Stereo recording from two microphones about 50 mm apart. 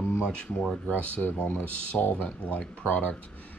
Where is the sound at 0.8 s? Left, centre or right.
Left.